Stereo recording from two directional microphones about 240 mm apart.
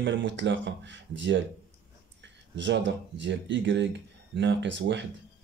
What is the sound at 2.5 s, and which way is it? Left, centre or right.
Speech, right.